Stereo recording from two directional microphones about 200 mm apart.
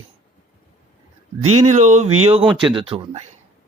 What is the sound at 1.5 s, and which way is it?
Speech, 35° right (ahead or behind).